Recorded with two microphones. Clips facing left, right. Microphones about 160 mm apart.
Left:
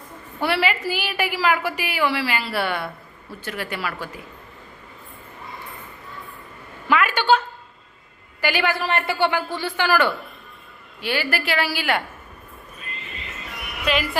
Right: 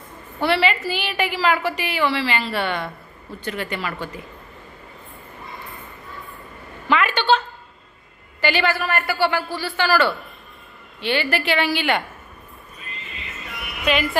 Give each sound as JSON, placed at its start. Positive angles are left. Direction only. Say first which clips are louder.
{"t": 0.4, "sound": "a woman's voice", "louder": "right 2 dB", "side_deg": 10}
{"t": 6.8, "sound": "a sound", "louder": "even", "side_deg": 10}
{"t": 8.8, "sound": "a man's voice", "louder": "even", "side_deg": 25}
{"t": 13.8, "sound": "a woman's voice", "louder": "right 2 dB", "side_deg": 0}